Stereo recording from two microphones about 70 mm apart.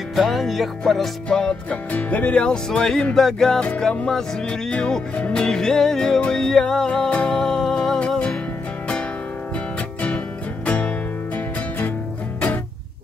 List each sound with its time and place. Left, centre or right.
0.1 s music: centre
1.9 s music: left
3.6 s music: centre
10.0 s music: centre